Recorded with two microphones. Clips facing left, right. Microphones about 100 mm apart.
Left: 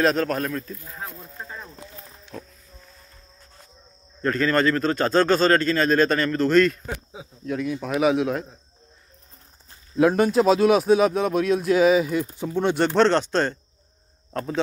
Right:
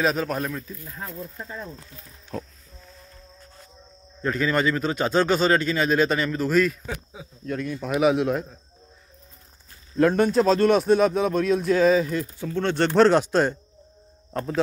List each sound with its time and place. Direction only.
0.0 s speech: 5° right (ahead or behind)
2.3 s a sound: 50° right (ahead or behind)
4.2 s a man's voice: 10° right (ahead or behind)
9.9 s speech: 5° left (ahead or behind)
12.8 s a man's voice: 5° right (ahead or behind)